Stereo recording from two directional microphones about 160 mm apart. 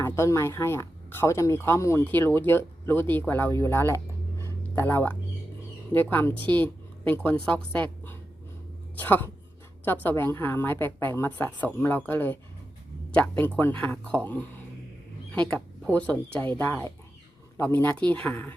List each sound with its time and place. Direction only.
0.0 s a woman's voice: 15° left (ahead or behind)